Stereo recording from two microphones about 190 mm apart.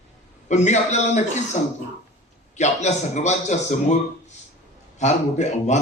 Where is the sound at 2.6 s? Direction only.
35° left (ahead or behind).